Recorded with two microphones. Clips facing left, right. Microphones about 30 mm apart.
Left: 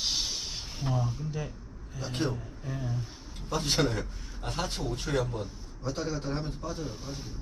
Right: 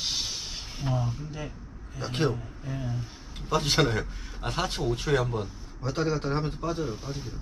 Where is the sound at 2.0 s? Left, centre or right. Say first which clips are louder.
Right 4 dB; right.